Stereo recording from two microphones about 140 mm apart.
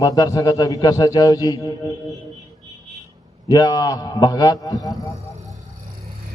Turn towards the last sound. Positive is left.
turn(degrees=25)  # may be behind; listen again after turning